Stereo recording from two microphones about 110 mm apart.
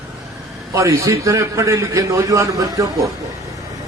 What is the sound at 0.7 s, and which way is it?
A man's voice, 30° right (ahead or behind).